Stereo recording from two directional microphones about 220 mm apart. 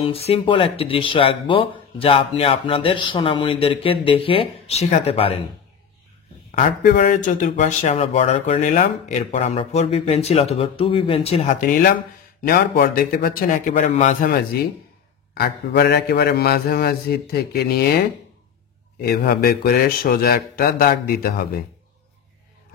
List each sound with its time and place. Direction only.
0.0 s speech: 25° left (ahead or behind)
6.5 s a man's voice: 35° left (ahead or behind)